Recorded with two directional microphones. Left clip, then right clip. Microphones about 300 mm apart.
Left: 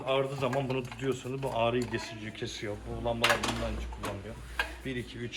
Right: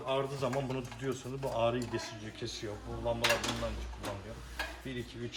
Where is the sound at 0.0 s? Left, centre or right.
Centre.